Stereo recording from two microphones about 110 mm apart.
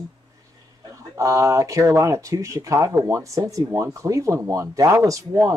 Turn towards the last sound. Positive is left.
turn(degrees=-30)  # may be behind; listen again after turning